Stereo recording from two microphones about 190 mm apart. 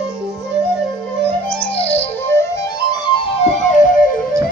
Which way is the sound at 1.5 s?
5° left (ahead or behind).